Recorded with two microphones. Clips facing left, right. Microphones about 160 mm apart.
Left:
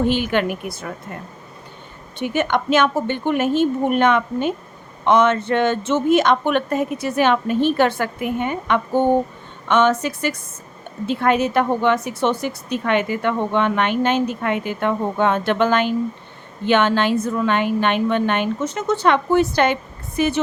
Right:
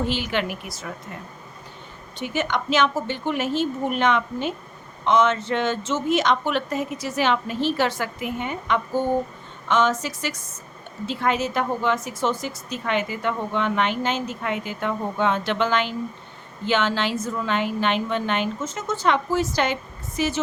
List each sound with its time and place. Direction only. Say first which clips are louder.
0.1 s a woman's voice: left 6 dB; 50° left (ahead or behind)
2.1 s a woman's voice: left 5 dB; 55° left (ahead or behind)